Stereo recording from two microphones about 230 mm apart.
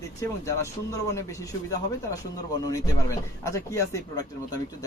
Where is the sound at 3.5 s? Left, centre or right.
Centre.